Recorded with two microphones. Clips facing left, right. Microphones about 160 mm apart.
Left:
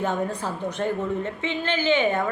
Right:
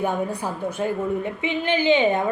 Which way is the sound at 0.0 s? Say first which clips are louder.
Right 1 dB; 10° right (ahead or behind).